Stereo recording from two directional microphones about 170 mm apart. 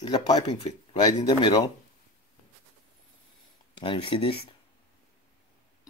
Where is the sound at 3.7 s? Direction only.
30° left (ahead or behind).